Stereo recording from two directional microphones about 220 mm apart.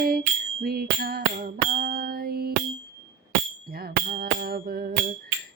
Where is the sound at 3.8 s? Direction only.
45° right (ahead or behind).